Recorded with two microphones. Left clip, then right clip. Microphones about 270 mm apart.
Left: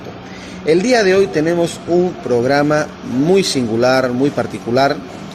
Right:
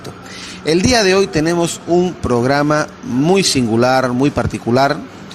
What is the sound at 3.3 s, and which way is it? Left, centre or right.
Speech, right.